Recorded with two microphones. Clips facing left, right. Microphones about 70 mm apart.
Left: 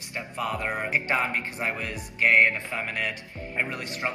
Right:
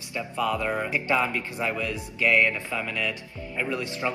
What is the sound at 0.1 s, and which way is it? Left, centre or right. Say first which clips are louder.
Speech: right 3 dB; left.